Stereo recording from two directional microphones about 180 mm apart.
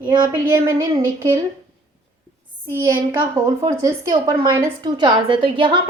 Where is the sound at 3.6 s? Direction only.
20° right (ahead or behind).